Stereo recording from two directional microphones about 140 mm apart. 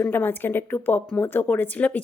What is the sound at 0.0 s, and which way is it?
Speech, 15° left (ahead or behind).